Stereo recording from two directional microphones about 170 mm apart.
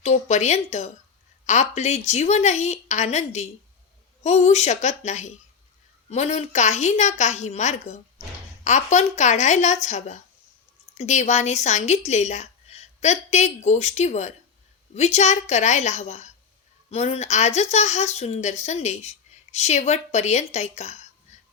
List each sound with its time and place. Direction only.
0.0 s a woman's voice: 40° left (ahead or behind)